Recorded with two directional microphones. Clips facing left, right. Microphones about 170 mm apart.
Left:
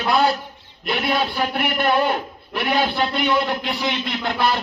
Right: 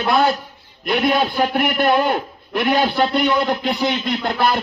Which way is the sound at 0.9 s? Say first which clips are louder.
Right 4 dB; 45° right (ahead or behind).